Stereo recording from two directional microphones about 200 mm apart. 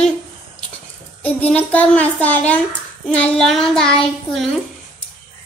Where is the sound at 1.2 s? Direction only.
5° left (ahead or behind).